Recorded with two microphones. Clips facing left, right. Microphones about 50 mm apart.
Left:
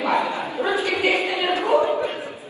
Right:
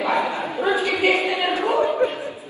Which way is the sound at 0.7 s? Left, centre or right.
Right.